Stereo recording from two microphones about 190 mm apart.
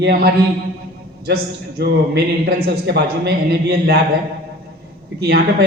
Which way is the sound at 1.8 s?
60° right (ahead or behind).